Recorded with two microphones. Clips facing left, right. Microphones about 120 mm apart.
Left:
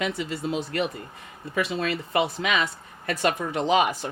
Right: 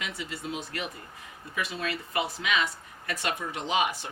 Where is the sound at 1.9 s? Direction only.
60° left (ahead or behind).